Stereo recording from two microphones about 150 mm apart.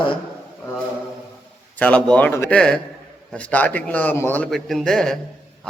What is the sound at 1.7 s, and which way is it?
A man's voice, 10° left (ahead or behind).